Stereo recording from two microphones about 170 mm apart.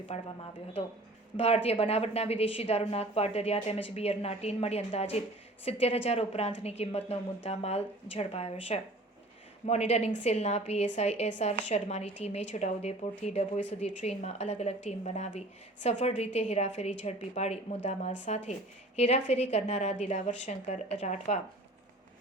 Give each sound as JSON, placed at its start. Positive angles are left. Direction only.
{"t": 0.1, "sound": "a woman's voice", "side_deg": 40}
{"t": 1.4, "sound": "a woman's voice", "side_deg": 35}